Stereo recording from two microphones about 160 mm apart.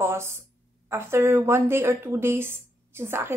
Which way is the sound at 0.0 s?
15° right (ahead or behind).